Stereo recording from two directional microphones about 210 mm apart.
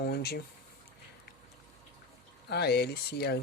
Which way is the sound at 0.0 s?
50° left (ahead or behind).